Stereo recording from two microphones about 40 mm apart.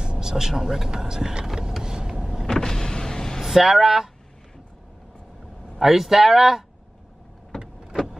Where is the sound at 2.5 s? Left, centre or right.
Centre.